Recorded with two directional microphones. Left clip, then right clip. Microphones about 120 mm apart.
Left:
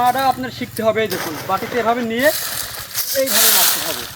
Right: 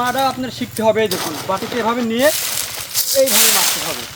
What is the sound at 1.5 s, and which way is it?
Speech, 30° right (ahead or behind).